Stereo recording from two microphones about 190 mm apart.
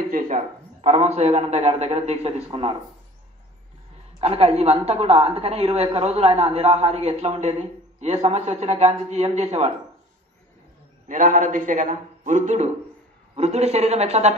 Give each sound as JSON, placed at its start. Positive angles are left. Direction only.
{"t": 0.1, "sound": "a woman's voice", "side_deg": -40}
{"t": 4.2, "sound": "a woman's voice", "side_deg": -35}
{"t": 11.1, "sound": "a man's voice", "side_deg": -45}